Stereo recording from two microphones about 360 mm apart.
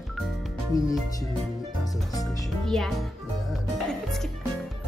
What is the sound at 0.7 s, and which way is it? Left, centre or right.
Speech, centre.